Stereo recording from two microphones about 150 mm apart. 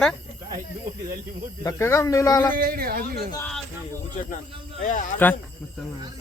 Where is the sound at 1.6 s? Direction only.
20° left (ahead or behind).